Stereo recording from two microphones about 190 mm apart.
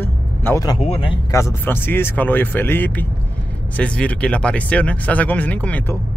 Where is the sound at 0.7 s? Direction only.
30° left (ahead or behind).